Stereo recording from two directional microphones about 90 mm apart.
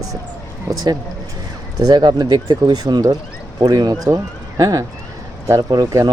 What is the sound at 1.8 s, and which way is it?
Speech, 50° right (ahead or behind).